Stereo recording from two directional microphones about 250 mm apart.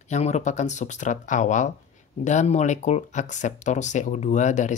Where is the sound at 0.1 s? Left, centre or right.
Left.